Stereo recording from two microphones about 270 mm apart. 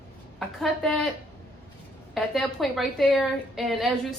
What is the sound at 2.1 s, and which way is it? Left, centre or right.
A woman's voice, centre.